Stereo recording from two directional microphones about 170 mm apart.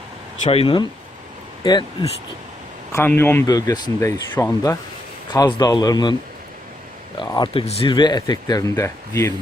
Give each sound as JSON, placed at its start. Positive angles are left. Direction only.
{"t": 0.4, "sound": "speech", "side_deg": 30}
{"t": 2.9, "sound": "speech", "side_deg": 15}
{"t": 7.3, "sound": "speech", "side_deg": 25}
{"t": 7.6, "sound": "speech", "side_deg": 35}